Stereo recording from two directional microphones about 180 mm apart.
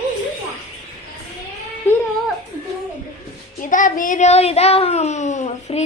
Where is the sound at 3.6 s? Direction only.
45° left (ahead or behind).